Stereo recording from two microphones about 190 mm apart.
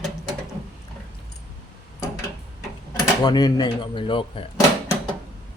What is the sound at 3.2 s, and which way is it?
Speech, 20° left (ahead or behind).